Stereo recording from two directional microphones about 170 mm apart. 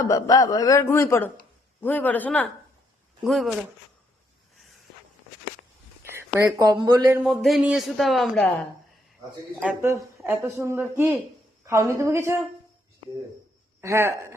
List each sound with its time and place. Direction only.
0.0 s a man's voice: 20° left (ahead or behind); by 3.5 s centre (ahead or behind)
6.0 s a sound: 15° right (ahead or behind)
6.7 s speech: 25° right (ahead or behind)
7.3 s speech: centre (ahead or behind)
9.6 s a woman's voice: 10° right (ahead or behind)
13.8 s a woman's voice: 15° right (ahead or behind)